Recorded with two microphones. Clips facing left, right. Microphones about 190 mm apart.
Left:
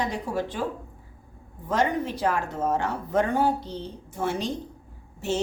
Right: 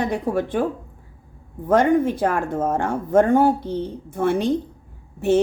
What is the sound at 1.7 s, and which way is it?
Speech, 55° right (ahead or behind).